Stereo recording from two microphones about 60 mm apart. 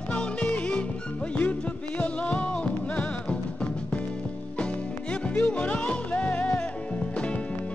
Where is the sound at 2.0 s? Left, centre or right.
Left.